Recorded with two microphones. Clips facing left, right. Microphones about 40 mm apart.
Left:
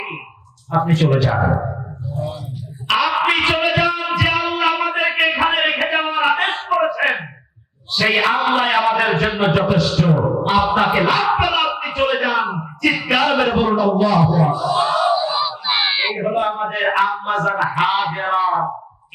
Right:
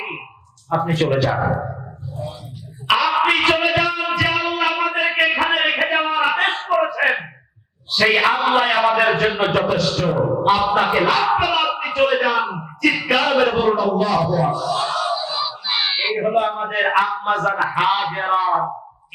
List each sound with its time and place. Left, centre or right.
0.9 s speech: centre
3.0 s music: centre
5.8 s a sound: centre
7.9 s speech: centre
10.5 s music: centre
14.3 s a sound: centre
16.1 s speech: centre